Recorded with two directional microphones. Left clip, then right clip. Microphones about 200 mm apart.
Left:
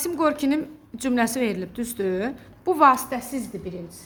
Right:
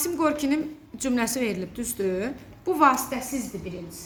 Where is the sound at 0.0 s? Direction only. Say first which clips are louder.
Left 2 dB; 45° left (ahead or behind).